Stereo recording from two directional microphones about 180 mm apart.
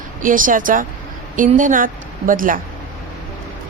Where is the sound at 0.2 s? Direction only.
50° right (ahead or behind).